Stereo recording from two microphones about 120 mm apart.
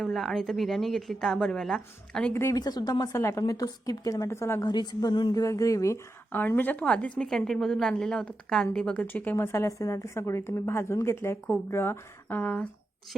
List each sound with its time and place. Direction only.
0.0 s speech: centre (ahead or behind)
2.3 s a woman's voice: 20° left (ahead or behind)
2.6 s a woman's voice: 35° left (ahead or behind)
4.7 s a woman's voice: 35° left (ahead or behind); by 12.6 s 10° left (ahead or behind)